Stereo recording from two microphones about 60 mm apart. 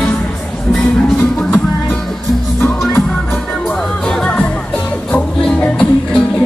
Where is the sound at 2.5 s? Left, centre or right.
Left.